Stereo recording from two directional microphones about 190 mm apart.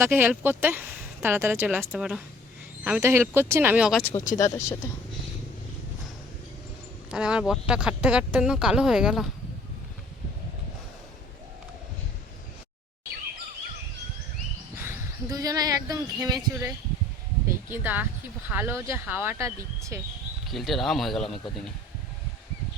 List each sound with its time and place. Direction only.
0.0 s speech: 10° right (ahead or behind)
4.0 s speech: 15° left (ahead or behind)
7.1 s speech: 5° right (ahead or behind)
14.8 s speech: 15° right (ahead or behind)
20.5 s speech: centre (ahead or behind)